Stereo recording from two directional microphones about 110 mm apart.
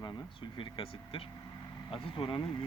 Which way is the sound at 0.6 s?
50° left (ahead or behind).